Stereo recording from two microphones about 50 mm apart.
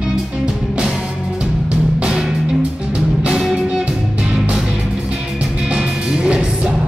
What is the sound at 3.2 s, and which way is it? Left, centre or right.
Music, centre.